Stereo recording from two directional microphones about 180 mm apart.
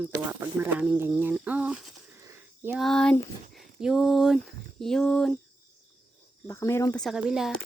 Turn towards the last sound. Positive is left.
turn(degrees=0)  # may be behind; listen again after turning